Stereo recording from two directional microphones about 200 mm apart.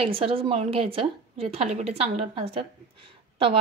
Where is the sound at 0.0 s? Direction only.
30° right (ahead or behind).